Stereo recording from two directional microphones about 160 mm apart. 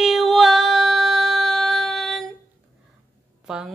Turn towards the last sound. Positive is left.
turn(degrees=-5)  # may be behind; listen again after turning